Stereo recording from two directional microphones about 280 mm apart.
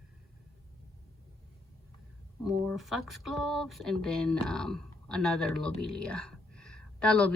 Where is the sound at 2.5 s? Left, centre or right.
Centre.